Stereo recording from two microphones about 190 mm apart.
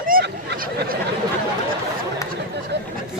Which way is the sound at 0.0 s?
50° right (ahead or behind).